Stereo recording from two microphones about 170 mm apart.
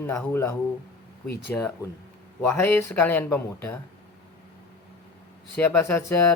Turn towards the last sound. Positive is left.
turn(degrees=15)  # may be behind; listen again after turning